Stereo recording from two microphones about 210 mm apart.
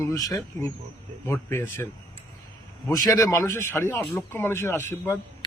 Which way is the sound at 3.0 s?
15° left (ahead or behind).